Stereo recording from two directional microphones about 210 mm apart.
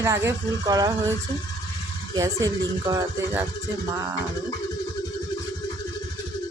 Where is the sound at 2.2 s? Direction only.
15° right (ahead or behind).